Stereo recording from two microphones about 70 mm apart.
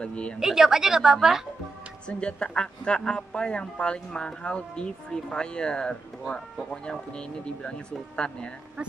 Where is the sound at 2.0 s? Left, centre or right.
Centre.